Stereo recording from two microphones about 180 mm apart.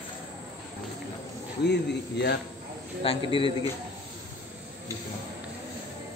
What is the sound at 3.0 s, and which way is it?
Speech, 30° left (ahead or behind).